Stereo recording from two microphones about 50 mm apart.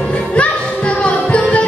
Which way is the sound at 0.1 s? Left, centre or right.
Left.